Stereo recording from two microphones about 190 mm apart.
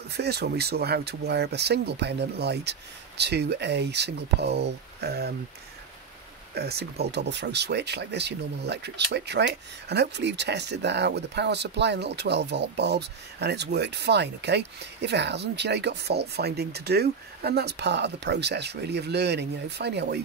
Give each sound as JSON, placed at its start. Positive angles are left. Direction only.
{"t": 0.1, "sound": "speech", "side_deg": -60}
{"t": 6.5, "sound": "speech", "side_deg": -60}